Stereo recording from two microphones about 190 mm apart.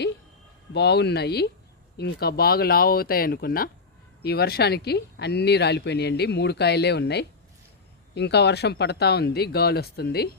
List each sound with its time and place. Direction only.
0.7 s speech: 60° left (ahead or behind)